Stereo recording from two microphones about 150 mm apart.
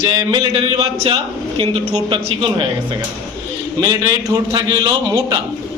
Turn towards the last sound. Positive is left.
turn(degrees=-25)  # may be behind; listen again after turning